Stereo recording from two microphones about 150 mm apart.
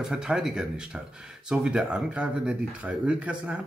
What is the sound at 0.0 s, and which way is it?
Speech, 5° right (ahead or behind).